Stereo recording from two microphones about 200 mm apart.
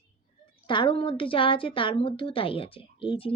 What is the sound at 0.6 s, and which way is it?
Speech, 25° left (ahead or behind).